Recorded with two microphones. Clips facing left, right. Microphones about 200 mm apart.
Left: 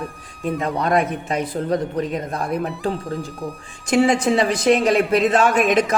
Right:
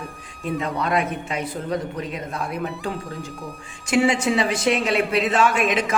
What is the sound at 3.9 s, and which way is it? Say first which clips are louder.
A woman's voice: left 3 dB; 40° left (ahead or behind).